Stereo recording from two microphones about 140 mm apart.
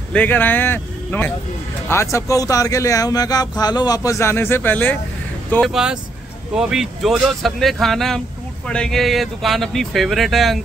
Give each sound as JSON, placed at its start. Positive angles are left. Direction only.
{"t": 0.1, "sound": "speech", "side_deg": 10}
{"t": 5.6, "sound": "speech", "side_deg": -5}